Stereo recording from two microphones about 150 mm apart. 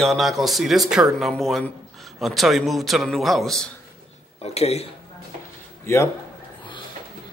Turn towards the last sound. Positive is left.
turn(degrees=20)  # may be behind; listen again after turning